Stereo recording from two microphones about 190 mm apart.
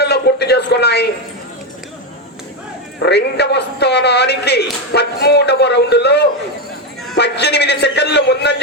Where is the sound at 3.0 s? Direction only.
60° left (ahead or behind).